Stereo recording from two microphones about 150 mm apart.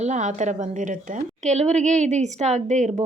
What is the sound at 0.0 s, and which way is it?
Speech, 55° right (ahead or behind).